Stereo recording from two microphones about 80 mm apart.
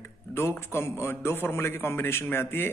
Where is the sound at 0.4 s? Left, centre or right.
Left.